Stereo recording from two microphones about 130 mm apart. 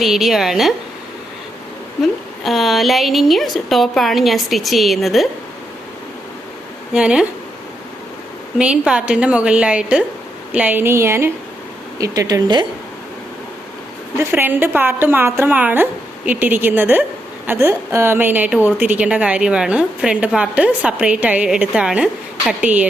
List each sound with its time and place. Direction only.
0.0 s a woman's voice: centre (ahead or behind)
2.4 s a woman's voice: centre (ahead or behind)
6.9 s speech: 5° right (ahead or behind)
8.5 s speech: 5° right (ahead or behind); by 12.6 s 30° right (ahead or behind)
14.2 s speech: 15° right (ahead or behind)